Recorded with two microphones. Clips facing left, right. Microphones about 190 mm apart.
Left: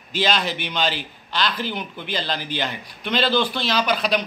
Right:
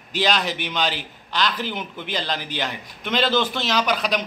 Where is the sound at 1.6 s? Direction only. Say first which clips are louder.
Left 1 dB; 15° right (ahead or behind).